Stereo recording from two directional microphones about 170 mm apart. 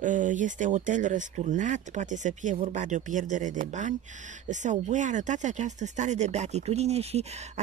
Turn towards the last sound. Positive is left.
turn(degrees=-40)  # may be behind; listen again after turning